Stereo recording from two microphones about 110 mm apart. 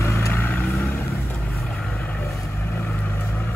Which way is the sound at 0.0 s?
25° left (ahead or behind).